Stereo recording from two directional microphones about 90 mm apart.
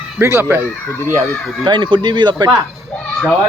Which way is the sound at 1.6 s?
60° right (ahead or behind).